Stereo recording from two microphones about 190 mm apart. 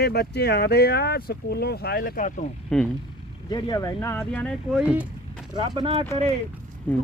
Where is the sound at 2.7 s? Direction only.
5° left (ahead or behind).